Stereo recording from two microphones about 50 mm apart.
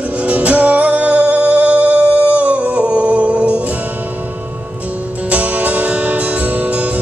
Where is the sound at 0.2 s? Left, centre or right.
Right.